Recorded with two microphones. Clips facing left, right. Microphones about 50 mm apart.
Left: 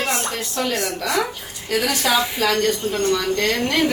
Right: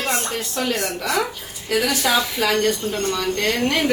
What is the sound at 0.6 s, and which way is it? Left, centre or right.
A woman's voice, centre.